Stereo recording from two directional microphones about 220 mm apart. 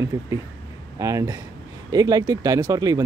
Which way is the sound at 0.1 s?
15° right (ahead or behind).